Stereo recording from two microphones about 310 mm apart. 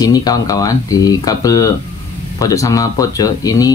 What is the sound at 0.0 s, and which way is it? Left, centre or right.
Speech, centre.